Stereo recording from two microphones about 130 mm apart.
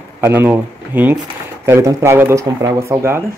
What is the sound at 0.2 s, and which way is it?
Speech, 15° right (ahead or behind).